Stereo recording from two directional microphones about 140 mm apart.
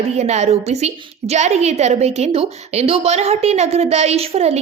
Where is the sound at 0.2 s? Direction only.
50° right (ahead or behind).